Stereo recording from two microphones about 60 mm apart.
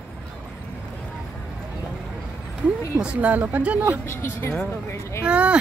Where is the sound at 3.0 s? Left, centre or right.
Right.